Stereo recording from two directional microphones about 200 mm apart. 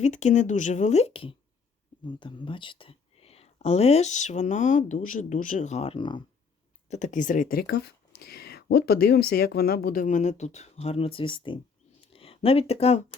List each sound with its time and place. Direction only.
0.0 s speech: 35° left (ahead or behind)
6.9 s speech: 40° left (ahead or behind)